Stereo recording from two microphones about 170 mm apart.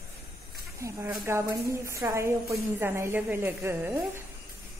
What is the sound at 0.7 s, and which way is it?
A woman's voice, 15° right (ahead or behind).